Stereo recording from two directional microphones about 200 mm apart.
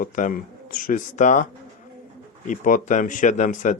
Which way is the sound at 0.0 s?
45° left (ahead or behind).